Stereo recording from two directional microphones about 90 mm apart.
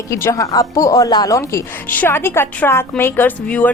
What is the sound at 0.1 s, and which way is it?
A woman's voice, 30° left (ahead or behind).